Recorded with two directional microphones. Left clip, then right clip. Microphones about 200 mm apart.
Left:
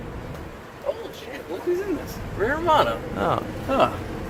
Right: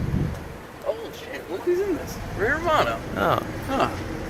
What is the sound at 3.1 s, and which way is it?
Speech, centre (ahead or behind).